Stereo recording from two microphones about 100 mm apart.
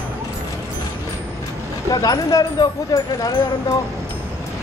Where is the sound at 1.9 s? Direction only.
40° left (ahead or behind).